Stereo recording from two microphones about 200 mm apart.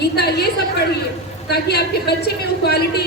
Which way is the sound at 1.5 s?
55° left (ahead or behind).